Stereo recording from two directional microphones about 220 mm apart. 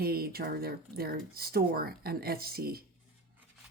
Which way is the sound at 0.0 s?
45° right (ahead or behind).